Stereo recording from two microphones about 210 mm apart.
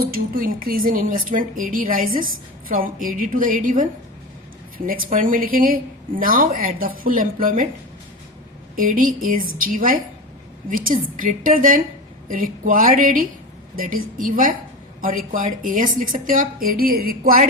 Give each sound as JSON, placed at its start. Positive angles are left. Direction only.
{"t": 0.0, "sound": "speech", "side_deg": -45}
{"t": 4.9, "sound": "speech", "side_deg": -40}
{"t": 8.7, "sound": "speech", "side_deg": -40}